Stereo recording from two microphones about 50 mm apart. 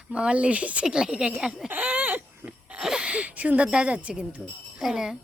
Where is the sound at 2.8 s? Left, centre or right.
Centre.